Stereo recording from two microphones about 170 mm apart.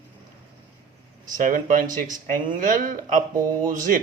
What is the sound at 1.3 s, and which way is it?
Speech, 50° right (ahead or behind).